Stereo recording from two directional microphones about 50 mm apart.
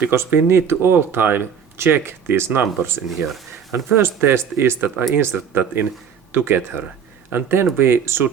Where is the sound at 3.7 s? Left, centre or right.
Right.